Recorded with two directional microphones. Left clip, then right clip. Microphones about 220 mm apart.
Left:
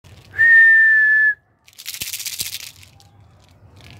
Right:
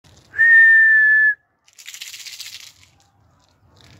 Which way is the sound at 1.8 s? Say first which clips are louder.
Left 5 dB; 45° left (ahead or behind).